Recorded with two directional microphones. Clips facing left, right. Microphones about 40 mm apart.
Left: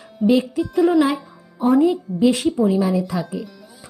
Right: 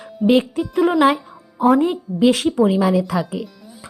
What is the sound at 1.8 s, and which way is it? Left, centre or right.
Speech, right.